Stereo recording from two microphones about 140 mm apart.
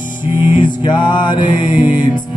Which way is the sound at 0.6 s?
35° left (ahead or behind).